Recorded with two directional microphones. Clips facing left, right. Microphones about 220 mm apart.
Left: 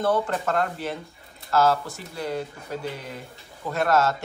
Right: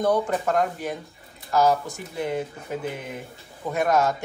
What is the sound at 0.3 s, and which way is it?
Speech, 10° right (ahead or behind).